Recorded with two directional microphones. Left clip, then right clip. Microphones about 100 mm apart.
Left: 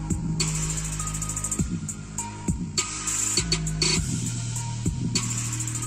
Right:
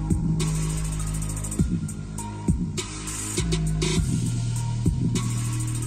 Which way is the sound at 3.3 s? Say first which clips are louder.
Even; 15° left (ahead or behind).